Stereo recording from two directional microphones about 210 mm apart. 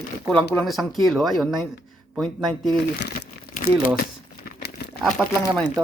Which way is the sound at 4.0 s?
45° left (ahead or behind).